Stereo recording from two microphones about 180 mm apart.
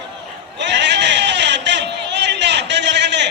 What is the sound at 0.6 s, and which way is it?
Sheep, 75° right (ahead or behind).